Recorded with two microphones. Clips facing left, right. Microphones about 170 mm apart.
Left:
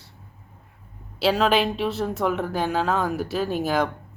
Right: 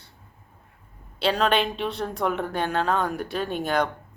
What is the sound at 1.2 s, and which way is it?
Speech, 5° left (ahead or behind).